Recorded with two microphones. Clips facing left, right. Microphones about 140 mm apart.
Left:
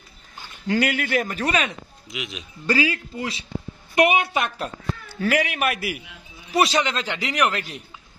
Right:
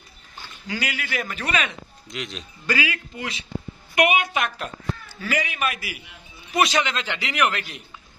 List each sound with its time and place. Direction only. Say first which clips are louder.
0.7 s speech: left 8 dB; 55° left (ahead or behind)
1.2 s a man's voice: left 3 dB; 40° left (ahead or behind)
2.0 s speech: even; 5° left (ahead or behind)
2.6 s a man's voice: left 4 dB; 35° left (ahead or behind)
5.0 s a man's voice: left 6 dB; 65° left (ahead or behind)
6.5 s a man's voice: left 1 dB; 35° left (ahead or behind)